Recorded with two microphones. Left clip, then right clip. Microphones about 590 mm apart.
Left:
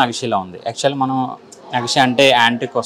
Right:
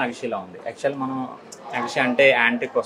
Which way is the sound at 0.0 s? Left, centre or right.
Left.